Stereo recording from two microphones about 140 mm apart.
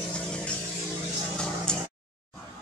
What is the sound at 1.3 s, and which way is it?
Music, 5° left (ahead or behind).